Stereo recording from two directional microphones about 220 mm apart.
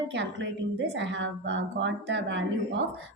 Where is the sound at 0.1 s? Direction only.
55° right (ahead or behind).